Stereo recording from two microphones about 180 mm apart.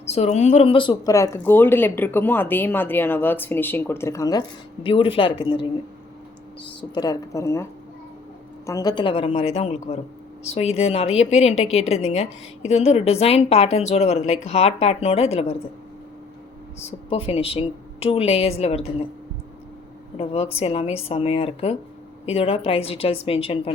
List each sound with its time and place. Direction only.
0.0 s speech: 35° left (ahead or behind)
6.9 s speech: 20° left (ahead or behind)
8.6 s a woman's voice: 20° left (ahead or behind)
17.1 s a woman's voice: 30° left (ahead or behind)
20.1 s a woman's voice: 35° left (ahead or behind)